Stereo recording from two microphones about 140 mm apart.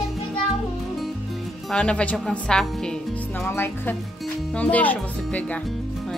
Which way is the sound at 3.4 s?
15° left (ahead or behind).